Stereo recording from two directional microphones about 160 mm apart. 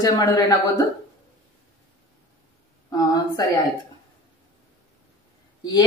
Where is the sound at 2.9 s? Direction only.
25° left (ahead or behind).